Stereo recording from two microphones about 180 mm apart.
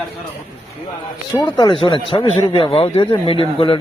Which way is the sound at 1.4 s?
25° left (ahead or behind).